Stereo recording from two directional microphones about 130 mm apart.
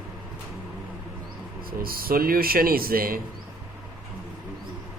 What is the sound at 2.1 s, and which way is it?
Speech, 90° right.